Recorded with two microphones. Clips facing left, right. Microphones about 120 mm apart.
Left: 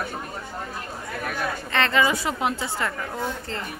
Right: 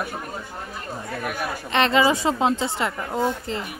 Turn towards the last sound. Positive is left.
turn(degrees=-20)  # may be behind; listen again after turning